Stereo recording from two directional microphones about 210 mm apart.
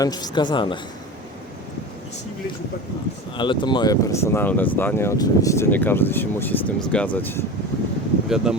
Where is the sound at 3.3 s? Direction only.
20° left (ahead or behind).